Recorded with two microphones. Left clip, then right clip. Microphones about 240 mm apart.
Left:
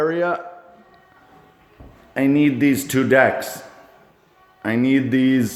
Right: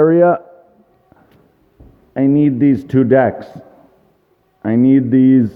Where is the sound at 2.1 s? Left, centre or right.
Right.